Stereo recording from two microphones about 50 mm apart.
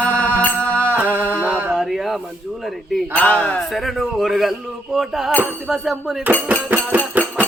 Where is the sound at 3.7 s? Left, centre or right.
Centre.